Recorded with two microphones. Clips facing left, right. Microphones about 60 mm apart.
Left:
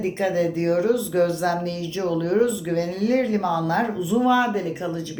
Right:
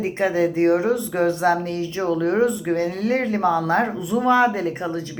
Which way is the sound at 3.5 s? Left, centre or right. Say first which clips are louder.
Right 3 dB; right.